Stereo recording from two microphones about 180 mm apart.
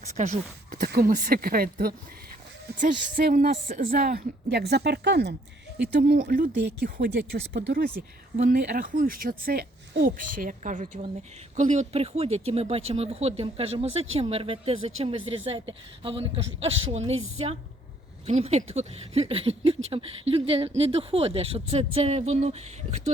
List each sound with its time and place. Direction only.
0.1 s a woman's voice: 40° right (ahead or behind); by 5.3 s 65° right (ahead or behind)
5.7 s a woman's voice: 55° right (ahead or behind)
6.6 s a woman's voice: 65° right (ahead or behind); by 23.1 s 40° right (ahead or behind)